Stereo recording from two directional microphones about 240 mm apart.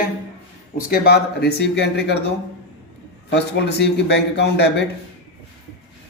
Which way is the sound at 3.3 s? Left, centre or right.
Left.